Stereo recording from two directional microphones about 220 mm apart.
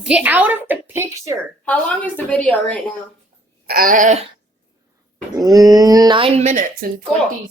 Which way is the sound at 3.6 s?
40° right (ahead or behind).